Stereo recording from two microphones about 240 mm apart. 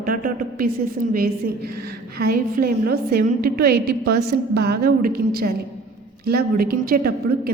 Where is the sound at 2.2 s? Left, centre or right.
Right.